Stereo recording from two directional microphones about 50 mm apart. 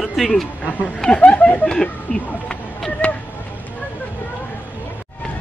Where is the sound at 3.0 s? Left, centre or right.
Left.